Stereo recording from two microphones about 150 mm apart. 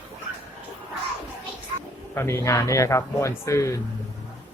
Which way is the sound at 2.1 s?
15° left (ahead or behind).